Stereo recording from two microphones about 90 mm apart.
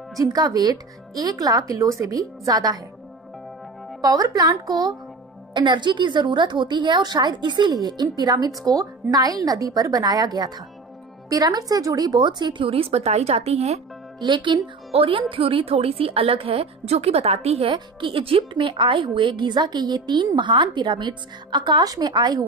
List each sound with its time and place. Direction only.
0.2 s a woman's voice: 40° right (ahead or behind)
4.0 s a woman's voice: 45° right (ahead or behind); by 12.9 s 90° right
14.2 s speech: 60° right (ahead or behind); by 16.6 s 90° right
17.6 s a woman's voice: 75° right (ahead or behind); by 22.4 s 50° right (ahead or behind)